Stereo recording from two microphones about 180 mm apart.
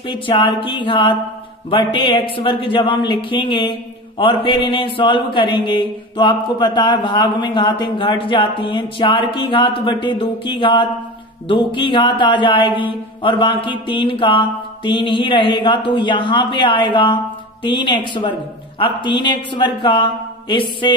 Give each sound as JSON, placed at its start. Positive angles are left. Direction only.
{"t": 0.0, "sound": "mantra", "side_deg": 30}